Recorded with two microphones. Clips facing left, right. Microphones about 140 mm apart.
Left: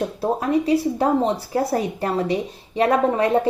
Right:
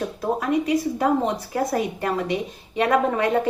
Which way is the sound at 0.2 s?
35° left (ahead or behind).